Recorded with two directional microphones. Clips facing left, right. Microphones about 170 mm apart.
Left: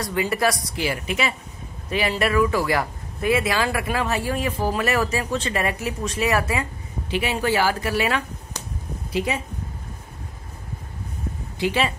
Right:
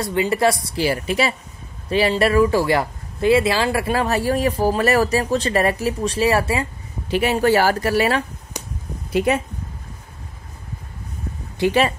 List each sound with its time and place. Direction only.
0.0 s speech: 25° right (ahead or behind)
7.1 s speech: 45° right (ahead or behind)
8.5 s a sound: 15° right (ahead or behind)
9.1 s speech: 55° right (ahead or behind)
11.6 s speech: 45° right (ahead or behind)